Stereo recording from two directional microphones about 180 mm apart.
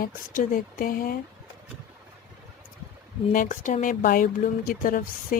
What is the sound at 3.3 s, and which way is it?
Speech, 45° left (ahead or behind).